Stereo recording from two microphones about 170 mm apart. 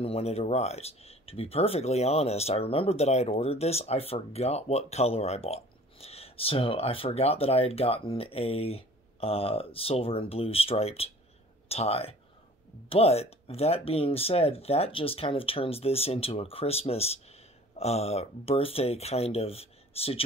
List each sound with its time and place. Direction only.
0.0 s speech: 35° left (ahead or behind)